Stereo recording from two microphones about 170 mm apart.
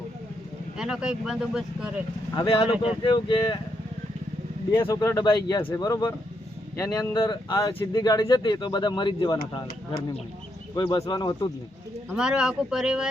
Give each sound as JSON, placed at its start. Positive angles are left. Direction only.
{"t": 0.8, "sound": "speech", "side_deg": -5}
{"t": 2.3, "sound": "speech", "side_deg": 30}
{"t": 4.8, "sound": "speech", "side_deg": 15}
{"t": 10.8, "sound": "speech", "side_deg": 25}
{"t": 12.1, "sound": "speech", "side_deg": -5}